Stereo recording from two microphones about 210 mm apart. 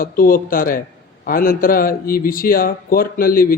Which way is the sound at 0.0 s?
45° left (ahead or behind).